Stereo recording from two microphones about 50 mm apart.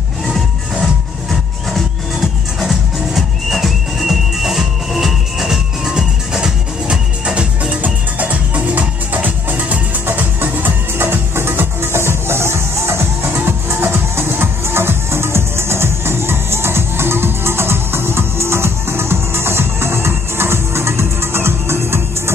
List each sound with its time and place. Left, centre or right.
2.6 s music: centre
7.8 s music: right
11.0 s music: right